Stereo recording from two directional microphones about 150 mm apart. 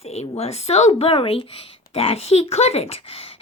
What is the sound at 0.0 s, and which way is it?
Speech, 45° left (ahead or behind).